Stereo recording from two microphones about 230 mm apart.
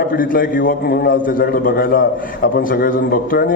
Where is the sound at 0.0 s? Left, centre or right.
Left.